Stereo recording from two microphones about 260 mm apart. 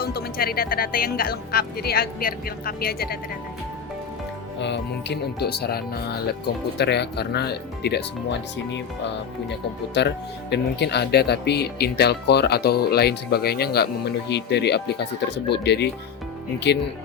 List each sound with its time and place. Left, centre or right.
0.0 s speech: left
4.6 s speech: left